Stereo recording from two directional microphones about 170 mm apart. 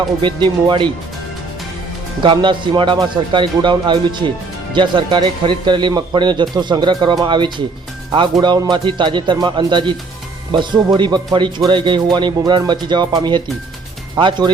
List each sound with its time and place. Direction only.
0.2 s a man's voice: 25° right (ahead or behind)
2.2 s a man's voice: 25° right (ahead or behind)